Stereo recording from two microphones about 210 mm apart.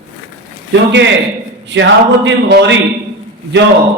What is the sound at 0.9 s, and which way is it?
A man's voice, 55° right (ahead or behind).